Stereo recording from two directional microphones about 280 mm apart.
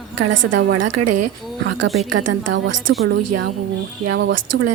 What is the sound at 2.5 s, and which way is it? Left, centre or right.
Speech, right.